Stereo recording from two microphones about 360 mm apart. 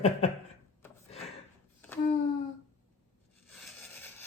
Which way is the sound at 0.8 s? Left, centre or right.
Centre.